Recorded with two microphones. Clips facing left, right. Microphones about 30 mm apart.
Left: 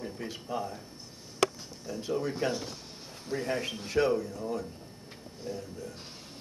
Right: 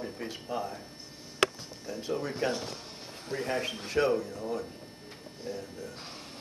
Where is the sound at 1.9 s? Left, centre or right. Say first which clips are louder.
Left 1 dB; centre.